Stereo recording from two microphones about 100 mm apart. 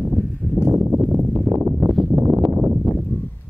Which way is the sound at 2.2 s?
15° right (ahead or behind).